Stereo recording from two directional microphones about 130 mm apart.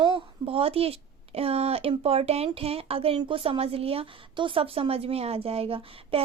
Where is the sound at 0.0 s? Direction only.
45° right (ahead or behind).